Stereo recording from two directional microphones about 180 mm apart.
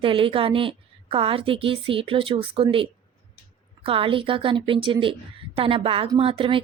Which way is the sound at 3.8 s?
30° right (ahead or behind).